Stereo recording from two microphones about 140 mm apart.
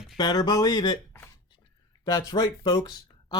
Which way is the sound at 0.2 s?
30° left (ahead or behind).